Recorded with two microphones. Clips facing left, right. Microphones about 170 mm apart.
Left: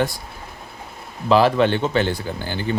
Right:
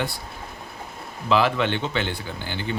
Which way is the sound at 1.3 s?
40° left (ahead or behind).